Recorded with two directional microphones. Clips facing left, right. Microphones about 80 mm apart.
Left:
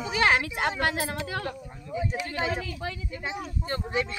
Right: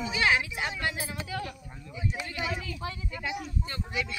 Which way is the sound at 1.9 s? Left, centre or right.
Left.